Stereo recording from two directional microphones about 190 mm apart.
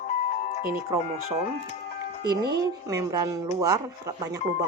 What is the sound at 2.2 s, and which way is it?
Speech, 20° right (ahead or behind).